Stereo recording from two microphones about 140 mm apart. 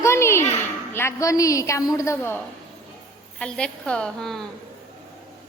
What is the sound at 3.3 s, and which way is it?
A woman's voice, 5° left (ahead or behind).